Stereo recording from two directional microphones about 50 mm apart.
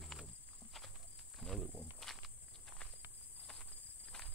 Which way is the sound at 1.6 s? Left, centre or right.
Left.